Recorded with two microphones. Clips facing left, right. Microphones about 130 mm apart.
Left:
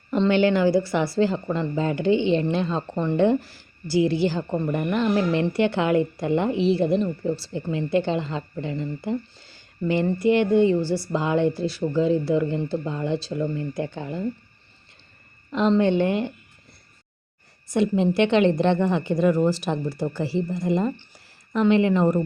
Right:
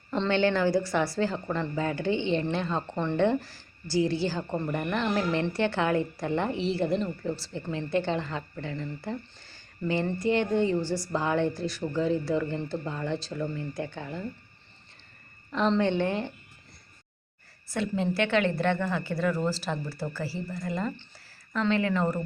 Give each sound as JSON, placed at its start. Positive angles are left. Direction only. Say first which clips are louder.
{"t": 0.1, "sound": "speech", "louder": "left 6 dB", "side_deg": 15}
{"t": 15.5, "sound": "speech", "louder": "left 5 dB", "side_deg": 15}
{"t": 17.7, "sound": "a woman's voice", "louder": "left 8 dB", "side_deg": 20}